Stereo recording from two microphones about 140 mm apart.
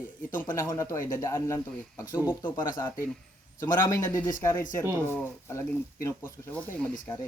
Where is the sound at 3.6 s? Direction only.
25° left (ahead or behind).